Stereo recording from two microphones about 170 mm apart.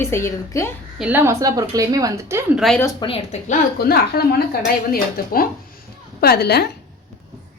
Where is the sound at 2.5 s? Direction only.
Centre (ahead or behind).